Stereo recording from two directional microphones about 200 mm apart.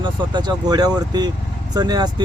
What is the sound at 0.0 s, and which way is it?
Speech, 25° right (ahead or behind).